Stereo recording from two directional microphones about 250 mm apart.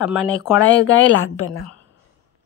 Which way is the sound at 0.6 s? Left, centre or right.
Left.